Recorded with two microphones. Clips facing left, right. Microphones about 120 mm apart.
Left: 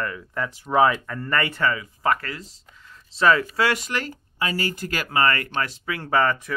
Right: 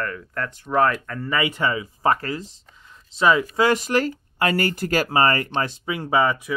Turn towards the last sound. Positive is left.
turn(degrees=-10)  # may be behind; listen again after turning